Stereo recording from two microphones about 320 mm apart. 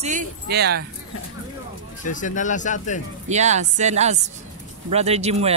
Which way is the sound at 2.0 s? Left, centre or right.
Left.